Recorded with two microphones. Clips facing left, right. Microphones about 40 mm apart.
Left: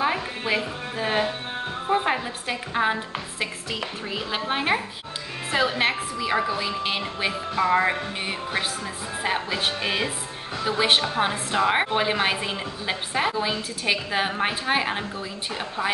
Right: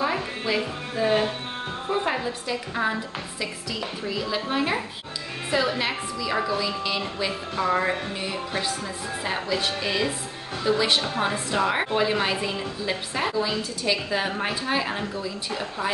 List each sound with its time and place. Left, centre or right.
0.0 s a woman's voice: left
6.3 s a woman's voice: left
9.2 s a woman's voice: left